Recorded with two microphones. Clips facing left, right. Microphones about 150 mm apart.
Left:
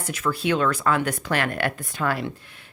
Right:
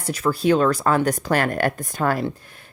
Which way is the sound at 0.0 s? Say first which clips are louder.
Right 5 dB; 35° right (ahead or behind).